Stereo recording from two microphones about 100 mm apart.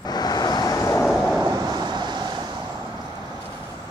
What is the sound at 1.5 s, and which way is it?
Vehicle, 40° right (ahead or behind).